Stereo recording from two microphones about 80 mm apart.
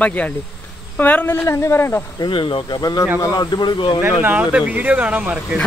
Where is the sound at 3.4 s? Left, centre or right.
Left.